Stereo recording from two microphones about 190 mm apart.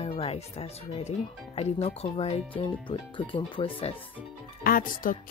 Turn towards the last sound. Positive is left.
turn(degrees=45)  # may be behind; listen again after turning